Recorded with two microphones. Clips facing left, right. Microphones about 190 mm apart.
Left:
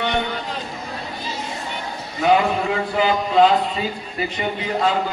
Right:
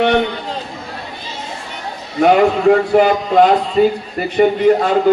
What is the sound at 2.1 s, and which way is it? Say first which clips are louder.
A man's voice: right 6 dB; 60° right (ahead or behind).